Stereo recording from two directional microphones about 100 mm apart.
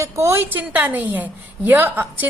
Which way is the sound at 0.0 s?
30° right (ahead or behind).